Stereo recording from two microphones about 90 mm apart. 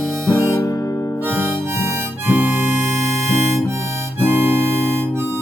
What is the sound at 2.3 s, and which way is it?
Harmonica, 20° right (ahead or behind).